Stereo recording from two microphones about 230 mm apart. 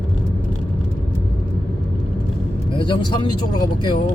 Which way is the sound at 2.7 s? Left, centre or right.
Left.